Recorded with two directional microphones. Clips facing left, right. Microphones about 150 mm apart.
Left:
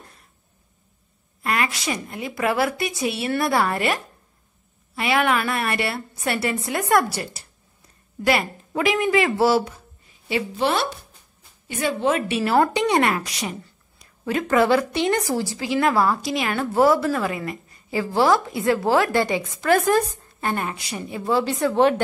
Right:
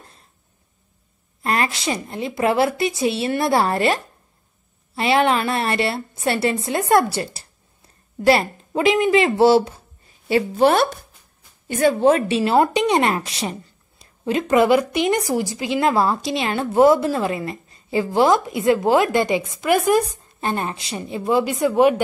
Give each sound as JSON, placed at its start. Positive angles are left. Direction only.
{"t": 1.4, "sound": "speech", "side_deg": -30}
{"t": 10.2, "sound": "a woman's voice", "side_deg": -45}
{"t": 12.4, "sound": "speech", "side_deg": -20}
{"t": 20.3, "sound": "a woman's voice", "side_deg": -25}